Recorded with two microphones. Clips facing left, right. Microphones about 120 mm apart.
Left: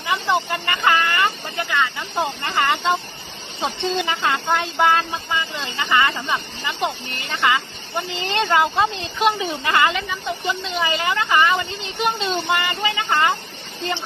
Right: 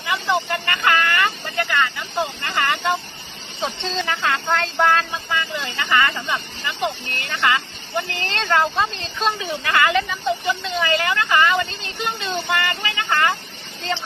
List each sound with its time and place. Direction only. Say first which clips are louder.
0.0 s vehicle: left 1 dB; 20° left (ahead or behind)
3.6 s speech: left 3 dB; 15° left (ahead or behind)